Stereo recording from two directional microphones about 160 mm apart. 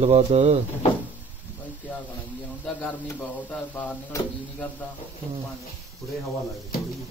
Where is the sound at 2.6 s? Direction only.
10° left (ahead or behind).